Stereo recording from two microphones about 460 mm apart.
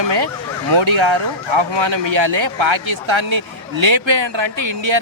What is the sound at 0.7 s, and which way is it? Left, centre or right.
Speech, right.